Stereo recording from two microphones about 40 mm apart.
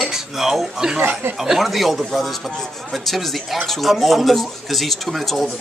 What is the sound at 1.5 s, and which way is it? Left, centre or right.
Speech, centre.